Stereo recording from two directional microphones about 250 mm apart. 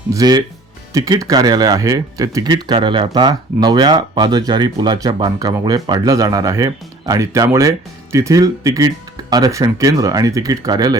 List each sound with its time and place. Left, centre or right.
0.1 s speech: centre